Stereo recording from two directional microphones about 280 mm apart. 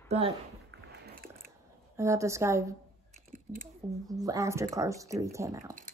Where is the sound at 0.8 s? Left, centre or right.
Right.